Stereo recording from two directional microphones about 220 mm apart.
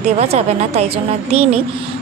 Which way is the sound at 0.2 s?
30° right (ahead or behind).